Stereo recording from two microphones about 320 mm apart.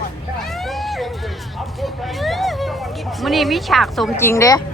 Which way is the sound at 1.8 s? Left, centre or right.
Centre.